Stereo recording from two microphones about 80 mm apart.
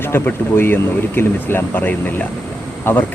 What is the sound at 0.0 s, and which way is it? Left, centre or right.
Speech, left.